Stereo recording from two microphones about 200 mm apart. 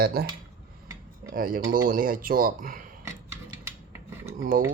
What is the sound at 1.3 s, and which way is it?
Speech, 45° right (ahead or behind).